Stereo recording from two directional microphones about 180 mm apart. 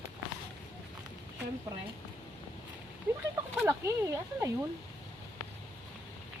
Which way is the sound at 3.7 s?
15° right (ahead or behind).